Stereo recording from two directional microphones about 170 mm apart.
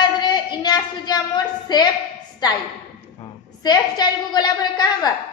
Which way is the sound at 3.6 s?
25° left (ahead or behind).